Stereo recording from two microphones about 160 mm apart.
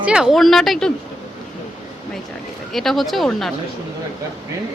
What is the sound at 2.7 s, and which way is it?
Speech, centre (ahead or behind).